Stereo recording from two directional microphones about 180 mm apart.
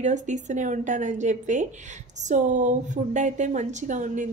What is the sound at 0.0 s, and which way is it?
A woman's voice, 40° right (ahead or behind).